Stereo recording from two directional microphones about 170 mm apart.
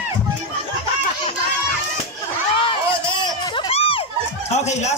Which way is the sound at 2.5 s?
30° left (ahead or behind).